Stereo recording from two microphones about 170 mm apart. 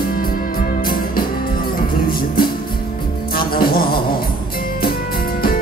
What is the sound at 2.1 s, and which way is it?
Music, 60° left (ahead or behind).